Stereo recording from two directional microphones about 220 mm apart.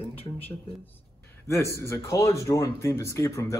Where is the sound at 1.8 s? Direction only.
15° left (ahead or behind).